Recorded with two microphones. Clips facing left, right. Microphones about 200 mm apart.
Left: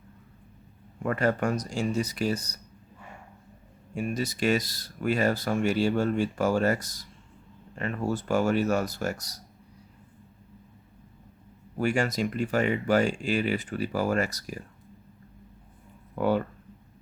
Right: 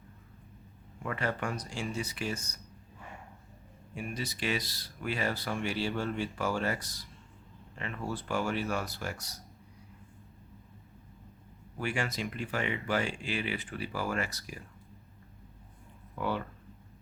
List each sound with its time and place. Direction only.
1.0 s speech: 45° left (ahead or behind)
3.9 s speech: 45° left (ahead or behind)
11.8 s speech: 40° left (ahead or behind)
16.1 s speech: 45° left (ahead or behind)